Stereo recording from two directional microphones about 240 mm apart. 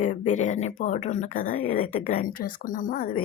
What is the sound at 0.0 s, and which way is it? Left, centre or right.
A woman's voice, left.